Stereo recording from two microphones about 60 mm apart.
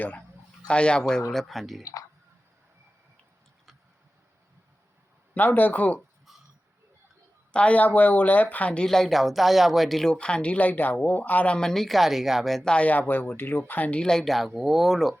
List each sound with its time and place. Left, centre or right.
0.0 s speech: left
0.7 s speech: centre
1.8 s speech: left
5.3 s speech: left
7.5 s a woman's voice: left
8.8 s a woman's voice: centre
11.7 s speech: centre
12.7 s speech: left
14.0 s speech: centre
14.3 s speech: centre